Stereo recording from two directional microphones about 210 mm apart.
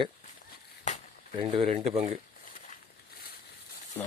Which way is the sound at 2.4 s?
40° left (ahead or behind).